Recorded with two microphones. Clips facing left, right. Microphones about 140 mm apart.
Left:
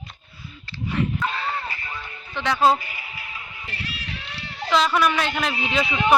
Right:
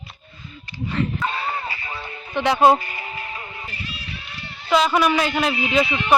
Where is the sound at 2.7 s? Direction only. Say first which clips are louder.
Right 6 dB; 40° right (ahead or behind).